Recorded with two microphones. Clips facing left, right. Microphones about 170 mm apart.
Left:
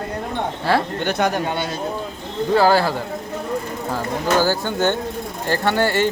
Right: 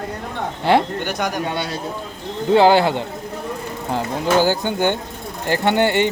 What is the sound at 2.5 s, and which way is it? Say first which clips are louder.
Speech: right 3 dB; 20° right (ahead or behind).